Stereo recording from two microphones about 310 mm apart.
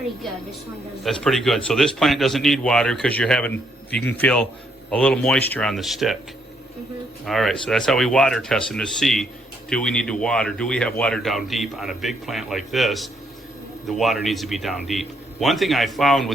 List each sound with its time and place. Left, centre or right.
1.0 s speech: centre
7.3 s speech: centre